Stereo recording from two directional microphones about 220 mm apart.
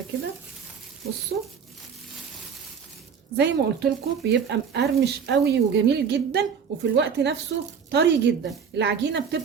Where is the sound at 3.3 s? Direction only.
50° right (ahead or behind).